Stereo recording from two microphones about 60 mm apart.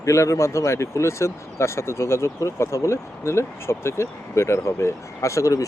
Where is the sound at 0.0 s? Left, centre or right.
Left.